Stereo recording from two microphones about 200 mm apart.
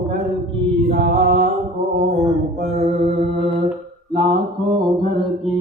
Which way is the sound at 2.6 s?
35° right (ahead or behind).